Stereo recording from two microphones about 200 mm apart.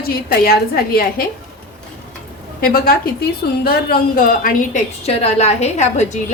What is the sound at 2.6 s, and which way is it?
A woman's voice, 50° left (ahead or behind).